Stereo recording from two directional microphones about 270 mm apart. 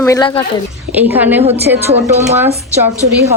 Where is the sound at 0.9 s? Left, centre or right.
Centre.